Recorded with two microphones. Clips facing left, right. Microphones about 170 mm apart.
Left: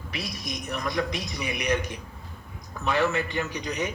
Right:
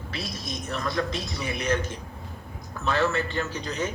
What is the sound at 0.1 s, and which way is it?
A man's voice, 15° left (ahead or behind).